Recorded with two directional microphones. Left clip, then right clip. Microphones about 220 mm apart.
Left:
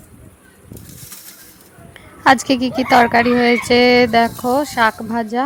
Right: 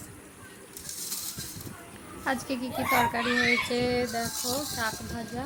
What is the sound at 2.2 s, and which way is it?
A woman's voice, 40° left (ahead or behind).